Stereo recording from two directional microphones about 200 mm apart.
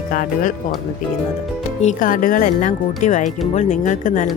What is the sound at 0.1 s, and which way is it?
Speech, 45° left (ahead or behind).